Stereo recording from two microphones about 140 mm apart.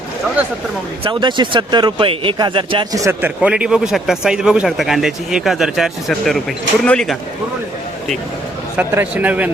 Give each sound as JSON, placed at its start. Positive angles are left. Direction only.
{"t": 1.0, "sound": "speech", "side_deg": -35}
{"t": 2.9, "sound": "speech", "side_deg": -20}
{"t": 8.7, "sound": "a man's voice", "side_deg": -10}